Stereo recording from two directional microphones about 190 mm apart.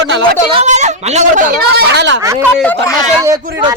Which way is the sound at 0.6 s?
40° right (ahead or behind).